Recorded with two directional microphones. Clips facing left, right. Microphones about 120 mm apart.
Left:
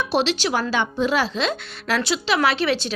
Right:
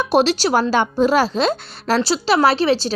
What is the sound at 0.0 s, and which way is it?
A woman's voice, 45° right (ahead or behind).